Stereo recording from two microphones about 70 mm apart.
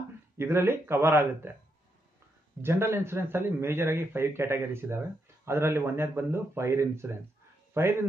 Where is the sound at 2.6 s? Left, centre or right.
Right.